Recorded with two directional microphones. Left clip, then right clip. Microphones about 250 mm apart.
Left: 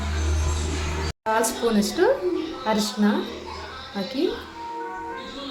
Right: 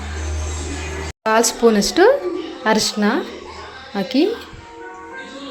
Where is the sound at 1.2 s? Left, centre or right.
Right.